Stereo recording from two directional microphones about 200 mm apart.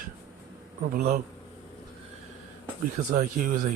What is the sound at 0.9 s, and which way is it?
Speech, 40° right (ahead or behind).